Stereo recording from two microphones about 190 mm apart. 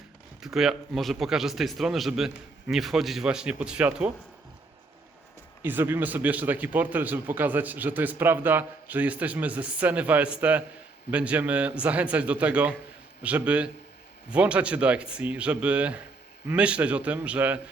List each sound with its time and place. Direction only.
0.4 s speech: centre (ahead or behind)
5.6 s a man's voice: 10° right (ahead or behind)